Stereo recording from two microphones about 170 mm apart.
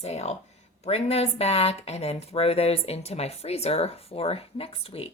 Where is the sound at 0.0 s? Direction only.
40° left (ahead or behind).